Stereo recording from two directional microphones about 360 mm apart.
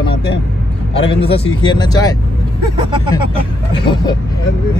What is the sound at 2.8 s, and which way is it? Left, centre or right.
Speech, centre.